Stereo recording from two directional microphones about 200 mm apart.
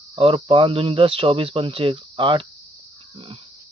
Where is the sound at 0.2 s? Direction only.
25° right (ahead or behind).